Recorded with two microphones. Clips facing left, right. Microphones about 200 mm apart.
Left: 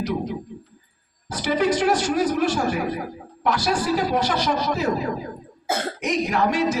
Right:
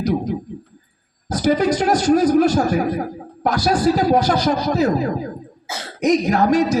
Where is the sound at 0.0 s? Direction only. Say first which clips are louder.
Right 5 dB; 40° right (ahead or behind).